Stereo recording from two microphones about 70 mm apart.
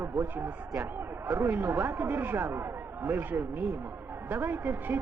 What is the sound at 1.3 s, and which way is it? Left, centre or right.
Speech, right.